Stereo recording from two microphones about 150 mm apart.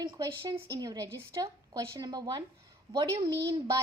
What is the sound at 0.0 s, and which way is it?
A woman's voice, 25° right (ahead or behind).